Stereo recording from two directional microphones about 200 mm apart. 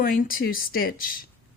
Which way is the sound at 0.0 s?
45° left (ahead or behind).